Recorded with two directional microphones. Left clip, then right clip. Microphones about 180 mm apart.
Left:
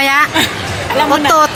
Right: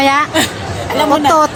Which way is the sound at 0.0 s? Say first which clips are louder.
Left 1 dB; 15° right (ahead or behind).